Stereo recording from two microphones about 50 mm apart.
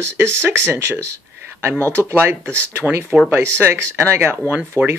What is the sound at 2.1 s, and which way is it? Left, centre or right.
Speech, right.